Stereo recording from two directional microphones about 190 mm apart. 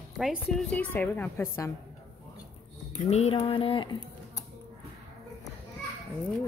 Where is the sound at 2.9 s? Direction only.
35° left (ahead or behind).